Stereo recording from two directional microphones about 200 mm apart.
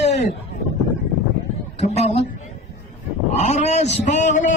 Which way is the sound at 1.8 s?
30° left (ahead or behind).